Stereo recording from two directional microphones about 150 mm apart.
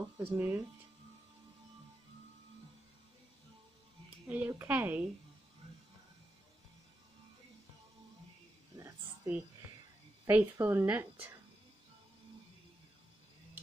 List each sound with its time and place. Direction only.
0.2 s a woman's voice: 15° right (ahead or behind)
4.3 s a woman's voice: 15° right (ahead or behind)
8.7 s a sound: 20° right (ahead or behind)
10.2 s a woman's voice: 15° right (ahead or behind)